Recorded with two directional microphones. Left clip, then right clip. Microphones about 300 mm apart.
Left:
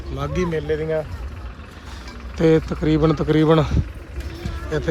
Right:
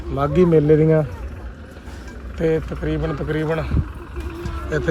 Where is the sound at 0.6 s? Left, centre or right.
Right.